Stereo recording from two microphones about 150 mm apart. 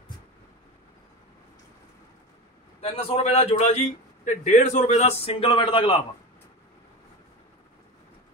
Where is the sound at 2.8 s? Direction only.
40° left (ahead or behind).